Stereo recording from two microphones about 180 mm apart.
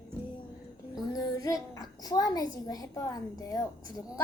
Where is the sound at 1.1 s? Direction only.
20° left (ahead or behind).